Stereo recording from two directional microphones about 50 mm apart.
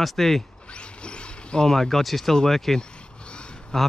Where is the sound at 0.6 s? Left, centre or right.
Left; by 2.8 s centre.